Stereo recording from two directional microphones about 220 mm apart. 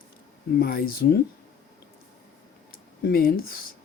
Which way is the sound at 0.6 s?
45° left (ahead or behind).